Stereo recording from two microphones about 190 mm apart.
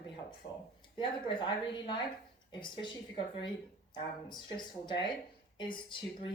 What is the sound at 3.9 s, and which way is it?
Speech, 25° left (ahead or behind).